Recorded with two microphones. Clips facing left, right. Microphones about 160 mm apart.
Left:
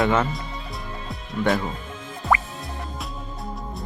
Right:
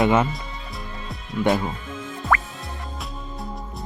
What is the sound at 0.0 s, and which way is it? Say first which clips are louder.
Speech: right 2 dB; 10° right (ahead or behind).